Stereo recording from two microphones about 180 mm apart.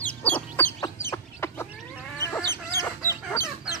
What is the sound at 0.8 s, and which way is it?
Chicken, 15° left (ahead or behind).